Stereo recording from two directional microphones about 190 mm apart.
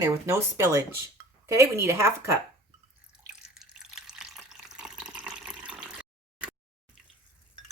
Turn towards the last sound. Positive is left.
turn(degrees=-5)  # may be behind; listen again after turning